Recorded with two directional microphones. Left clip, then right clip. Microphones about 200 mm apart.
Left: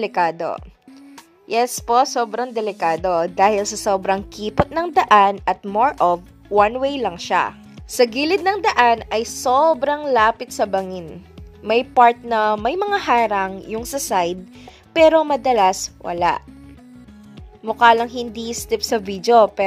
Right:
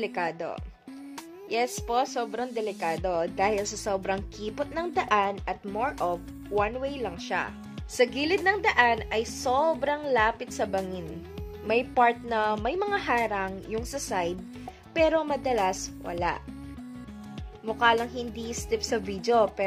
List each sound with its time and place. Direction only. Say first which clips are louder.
0.0 s speech: left 11 dB; 35° left (ahead or behind)
1.8 s a woman's voice: left 11 dB; 35° left (ahead or behind)
17.6 s speech: left 10 dB; 35° left (ahead or behind)